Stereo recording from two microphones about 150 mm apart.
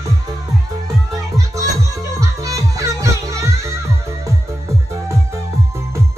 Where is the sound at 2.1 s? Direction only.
20° right (ahead or behind).